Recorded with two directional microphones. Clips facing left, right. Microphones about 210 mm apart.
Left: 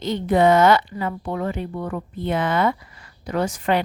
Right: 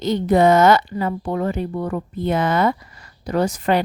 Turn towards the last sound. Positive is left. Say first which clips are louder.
# right 3 dB
turn(degrees=-40)  # may be behind; listen again after turning